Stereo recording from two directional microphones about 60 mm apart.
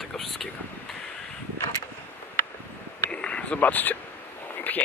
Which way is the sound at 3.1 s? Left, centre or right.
Centre.